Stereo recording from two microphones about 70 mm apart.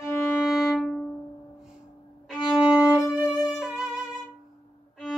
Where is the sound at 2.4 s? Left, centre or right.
Centre.